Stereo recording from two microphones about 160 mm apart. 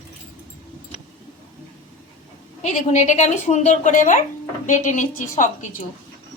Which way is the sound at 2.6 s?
45° left (ahead or behind).